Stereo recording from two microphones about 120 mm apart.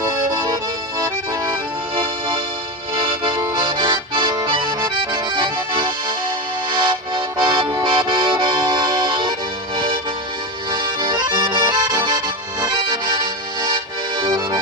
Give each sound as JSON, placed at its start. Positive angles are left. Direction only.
{"t": 0.0, "sound": "accordion", "side_deg": -30}
{"t": 2.0, "sound": "music", "side_deg": -50}
{"t": 3.5, "sound": "accordion", "side_deg": -40}
{"t": 6.7, "sound": "music", "side_deg": -40}
{"t": 7.8, "sound": "accordion", "side_deg": -40}
{"t": 10.7, "sound": "accordion", "side_deg": -35}
{"t": 14.2, "sound": "accordion", "side_deg": -35}